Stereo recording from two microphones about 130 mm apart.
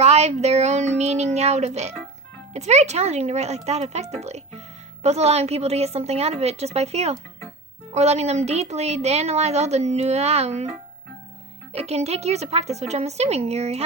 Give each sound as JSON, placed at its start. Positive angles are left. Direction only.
{"t": 0.0, "sound": "a woman's voice", "side_deg": -60}
{"t": 11.7, "sound": "a woman's voice", "side_deg": -55}